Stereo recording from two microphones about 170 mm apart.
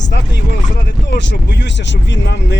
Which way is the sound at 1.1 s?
90° left.